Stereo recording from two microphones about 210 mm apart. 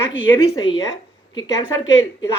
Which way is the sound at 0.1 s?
60° left (ahead or behind).